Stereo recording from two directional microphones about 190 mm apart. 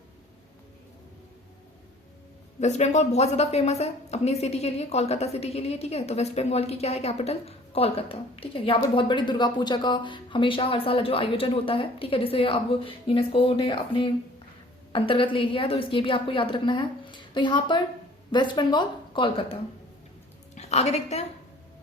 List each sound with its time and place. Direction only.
2.6 s a woman's voice: 35° left (ahead or behind)
20.6 s a woman's voice: 35° left (ahead or behind)